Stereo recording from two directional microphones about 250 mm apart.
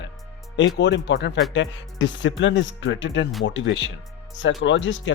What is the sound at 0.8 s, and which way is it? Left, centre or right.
Speech, left.